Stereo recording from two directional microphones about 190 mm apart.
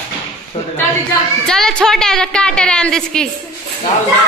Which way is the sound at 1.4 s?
5° left (ahead or behind).